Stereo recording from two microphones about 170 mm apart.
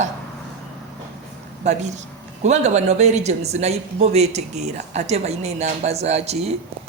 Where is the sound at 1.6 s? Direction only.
45° right (ahead or behind).